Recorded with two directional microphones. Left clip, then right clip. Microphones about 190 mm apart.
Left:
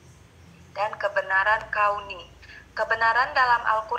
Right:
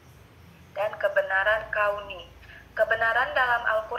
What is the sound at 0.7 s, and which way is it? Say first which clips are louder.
A man's voice: right 1 dB; 25° left (ahead or behind).